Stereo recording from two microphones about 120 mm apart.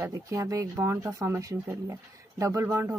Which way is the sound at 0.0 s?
25° right (ahead or behind).